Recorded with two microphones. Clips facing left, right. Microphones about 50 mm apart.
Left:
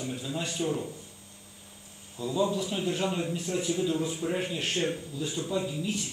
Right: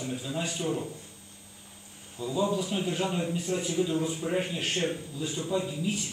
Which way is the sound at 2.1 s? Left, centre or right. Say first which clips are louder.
Even; centre.